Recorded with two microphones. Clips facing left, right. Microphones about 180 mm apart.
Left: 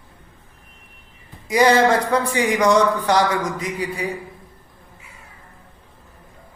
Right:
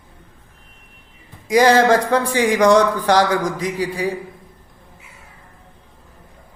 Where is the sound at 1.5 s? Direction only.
90° right.